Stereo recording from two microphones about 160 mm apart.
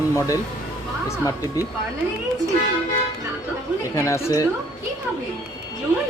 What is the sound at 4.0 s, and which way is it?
Speech, 20° left (ahead or behind).